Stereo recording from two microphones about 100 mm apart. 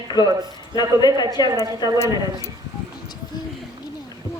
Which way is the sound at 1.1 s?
40° right (ahead or behind).